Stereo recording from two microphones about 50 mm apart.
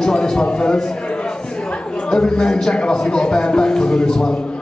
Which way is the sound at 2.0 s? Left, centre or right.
Centre.